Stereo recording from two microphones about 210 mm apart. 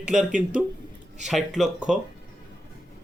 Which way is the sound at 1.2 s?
Centre (ahead or behind).